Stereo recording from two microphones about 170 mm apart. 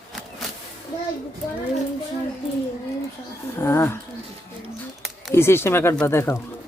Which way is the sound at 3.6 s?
15° left (ahead or behind).